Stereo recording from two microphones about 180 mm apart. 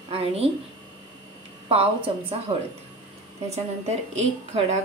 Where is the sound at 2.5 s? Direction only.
30° right (ahead or behind).